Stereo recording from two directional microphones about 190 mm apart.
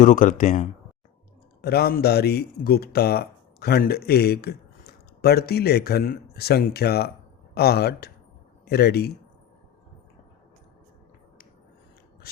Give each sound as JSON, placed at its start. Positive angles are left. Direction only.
{"t": 0.0, "sound": "speech", "side_deg": 40}
{"t": 1.6, "sound": "speech", "side_deg": 55}
{"t": 12.2, "sound": "mechanisms", "side_deg": 55}